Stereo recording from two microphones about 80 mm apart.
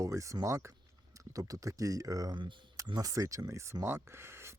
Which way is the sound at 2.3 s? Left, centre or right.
Right.